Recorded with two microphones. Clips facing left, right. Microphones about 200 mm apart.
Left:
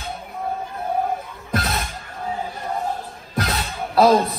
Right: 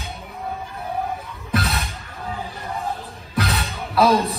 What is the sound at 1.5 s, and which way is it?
Music, 50° left (ahead or behind).